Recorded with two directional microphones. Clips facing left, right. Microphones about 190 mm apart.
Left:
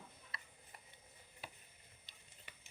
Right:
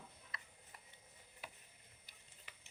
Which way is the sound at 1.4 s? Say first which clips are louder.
Left 1 dB; 30° left (ahead or behind).